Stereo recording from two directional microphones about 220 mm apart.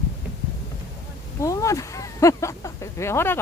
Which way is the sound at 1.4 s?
15° left (ahead or behind).